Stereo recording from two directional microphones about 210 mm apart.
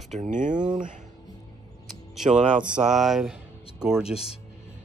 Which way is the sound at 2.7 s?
5° right (ahead or behind).